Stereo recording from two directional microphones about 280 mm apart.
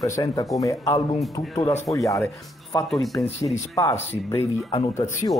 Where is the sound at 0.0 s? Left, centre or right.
Centre.